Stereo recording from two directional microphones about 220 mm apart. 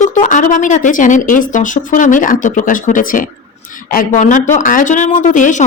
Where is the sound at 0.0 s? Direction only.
35° left (ahead or behind).